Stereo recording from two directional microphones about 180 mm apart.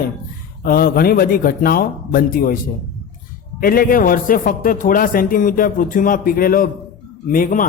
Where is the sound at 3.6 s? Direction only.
55° left (ahead or behind).